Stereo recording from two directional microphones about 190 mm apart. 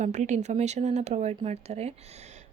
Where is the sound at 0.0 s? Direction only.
40° right (ahead or behind).